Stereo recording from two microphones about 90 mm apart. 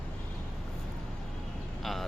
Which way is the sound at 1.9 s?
Centre (ahead or behind).